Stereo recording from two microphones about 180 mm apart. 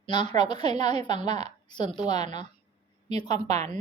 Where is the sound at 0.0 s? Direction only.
25° left (ahead or behind).